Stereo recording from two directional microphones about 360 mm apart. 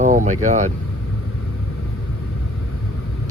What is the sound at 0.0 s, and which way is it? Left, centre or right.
Vehicle, right.